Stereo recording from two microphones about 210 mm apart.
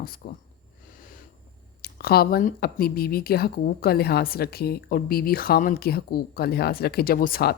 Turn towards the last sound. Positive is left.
turn(degrees=45)  # may be behind; listen again after turning